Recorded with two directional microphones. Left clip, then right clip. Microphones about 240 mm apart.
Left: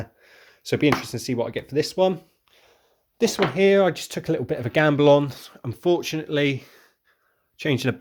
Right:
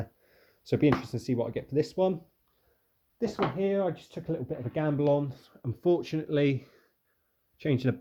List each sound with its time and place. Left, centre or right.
0.0 s speech: centre
3.2 s speech: left; by 7.9 s centre